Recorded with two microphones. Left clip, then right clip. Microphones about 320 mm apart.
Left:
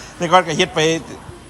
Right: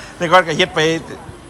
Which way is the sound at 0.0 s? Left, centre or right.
Centre.